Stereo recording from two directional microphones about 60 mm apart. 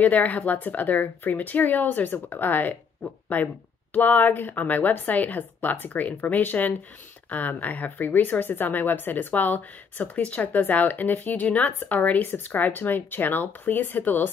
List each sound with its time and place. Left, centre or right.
0.0 s speech: left